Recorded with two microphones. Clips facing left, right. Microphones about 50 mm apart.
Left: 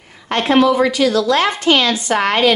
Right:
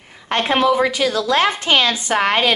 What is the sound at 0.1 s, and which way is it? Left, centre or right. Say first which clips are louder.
A woman's voice: left 4 dB; centre.